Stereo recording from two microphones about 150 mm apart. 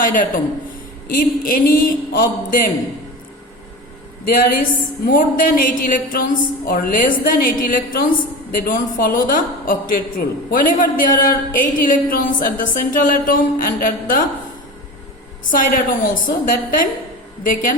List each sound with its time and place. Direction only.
0.0 s a man's voice: 65° left (ahead or behind)
4.4 s a woman's voice: 70° left (ahead or behind)
15.4 s a man's voice: 60° left (ahead or behind)